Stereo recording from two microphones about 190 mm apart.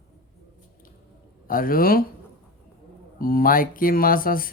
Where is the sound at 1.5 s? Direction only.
50° left (ahead or behind).